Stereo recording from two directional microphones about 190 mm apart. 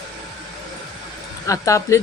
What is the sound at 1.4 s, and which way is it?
Speech, 15° left (ahead or behind).